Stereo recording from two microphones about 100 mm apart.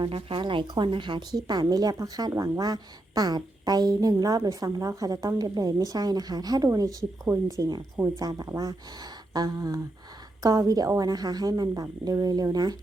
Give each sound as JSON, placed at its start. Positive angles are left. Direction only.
{"t": 0.0, "sound": "speech", "side_deg": -60}
{"t": 1.5, "sound": "a woman's voice", "side_deg": -40}
{"t": 7.9, "sound": "speech", "side_deg": -25}
{"t": 8.2, "sound": "a woman's voice", "side_deg": -40}